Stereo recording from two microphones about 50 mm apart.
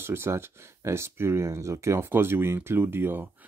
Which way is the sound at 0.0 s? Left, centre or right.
Right.